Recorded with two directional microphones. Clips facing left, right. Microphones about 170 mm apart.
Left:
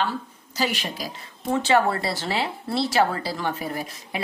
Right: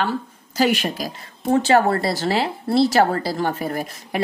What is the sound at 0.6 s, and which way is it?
Speech, 55° right (ahead or behind).